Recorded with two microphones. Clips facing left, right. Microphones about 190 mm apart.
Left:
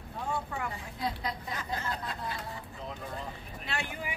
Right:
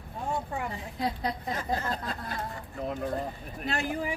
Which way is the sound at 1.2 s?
35° right (ahead or behind).